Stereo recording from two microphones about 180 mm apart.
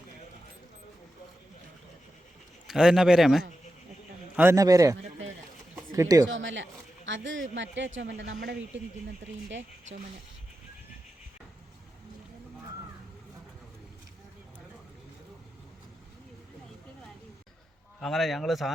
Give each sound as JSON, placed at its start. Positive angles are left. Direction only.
{"t": 2.6, "sound": "a man's voice", "side_deg": -5}
{"t": 4.4, "sound": "a man's voice", "side_deg": -15}
{"t": 6.2, "sound": "a man's voice", "side_deg": -90}
{"t": 18.0, "sound": "a man's voice", "side_deg": 0}